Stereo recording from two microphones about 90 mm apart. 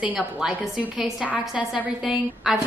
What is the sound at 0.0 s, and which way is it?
A woman's voice, 10° right (ahead or behind).